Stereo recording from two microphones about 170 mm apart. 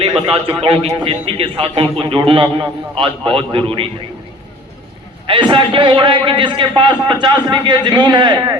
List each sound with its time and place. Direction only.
0.0 s a man's voice: 35° right (ahead or behind)
5.3 s a man's voice: 30° right (ahead or behind)